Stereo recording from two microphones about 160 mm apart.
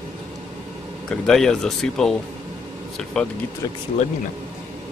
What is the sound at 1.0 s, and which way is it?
Speech, 5° left (ahead or behind).